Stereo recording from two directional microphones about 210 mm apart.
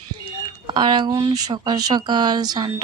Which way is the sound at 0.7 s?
20° right (ahead or behind).